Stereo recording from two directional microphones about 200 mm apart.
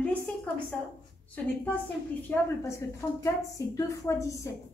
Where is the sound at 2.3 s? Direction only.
10° left (ahead or behind).